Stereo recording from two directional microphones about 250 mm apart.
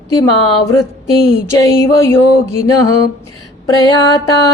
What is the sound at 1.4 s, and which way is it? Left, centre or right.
Speech, centre.